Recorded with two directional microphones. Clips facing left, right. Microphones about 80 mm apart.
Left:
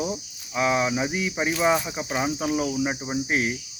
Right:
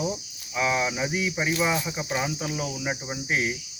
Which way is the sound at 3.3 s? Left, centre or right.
Left.